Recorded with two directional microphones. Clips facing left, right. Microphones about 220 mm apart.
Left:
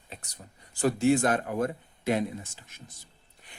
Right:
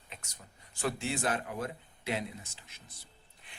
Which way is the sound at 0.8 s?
40° left (ahead or behind).